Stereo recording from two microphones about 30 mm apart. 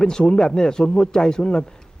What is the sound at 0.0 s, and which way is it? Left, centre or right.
Speech, left.